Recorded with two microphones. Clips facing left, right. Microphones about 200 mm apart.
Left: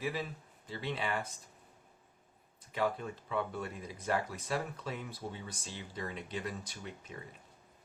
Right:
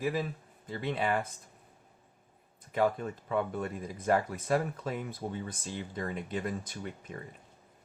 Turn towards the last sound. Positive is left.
turn(degrees=-50)  # may be behind; listen again after turning